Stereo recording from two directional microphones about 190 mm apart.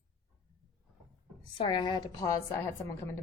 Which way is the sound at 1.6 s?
25° left (ahead or behind).